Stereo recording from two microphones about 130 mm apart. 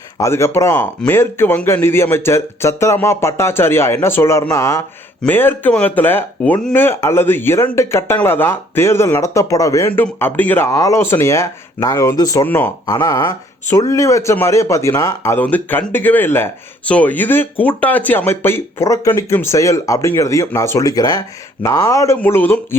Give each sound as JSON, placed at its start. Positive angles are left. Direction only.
{"t": 0.2, "sound": "speech", "side_deg": 20}
{"t": 6.8, "sound": "speech", "side_deg": 20}
{"t": 12.5, "sound": "speech", "side_deg": 15}
{"t": 12.8, "sound": "speech", "side_deg": 25}
{"t": 15.4, "sound": "speech", "side_deg": 15}